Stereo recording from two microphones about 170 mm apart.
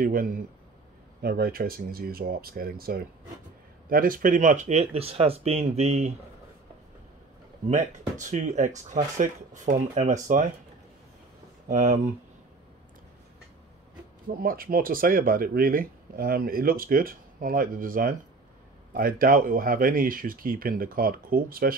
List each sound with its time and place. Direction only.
0.0 s speech: 55° right (ahead or behind); by 6.1 s 40° right (ahead or behind)
7.7 s speech: 45° right (ahead or behind)
11.7 s speech: 50° right (ahead or behind)
14.3 s speech: 60° right (ahead or behind)